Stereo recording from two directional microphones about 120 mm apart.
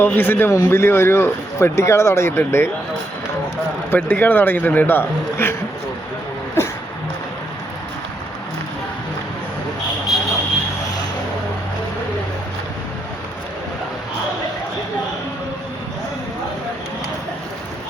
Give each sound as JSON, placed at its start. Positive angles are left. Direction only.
{"t": 0.0, "sound": "speech", "side_deg": 20}
{"t": 3.9, "sound": "a man's voice", "side_deg": 15}
{"t": 6.6, "sound": "a sound", "side_deg": 20}
{"t": 10.1, "sound": "vehicle", "side_deg": 0}